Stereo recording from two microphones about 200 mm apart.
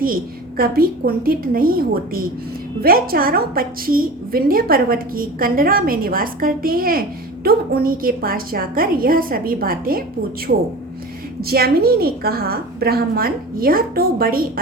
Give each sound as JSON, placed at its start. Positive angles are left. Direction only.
{"t": 0.0, "sound": "a woman's voice", "side_deg": -45}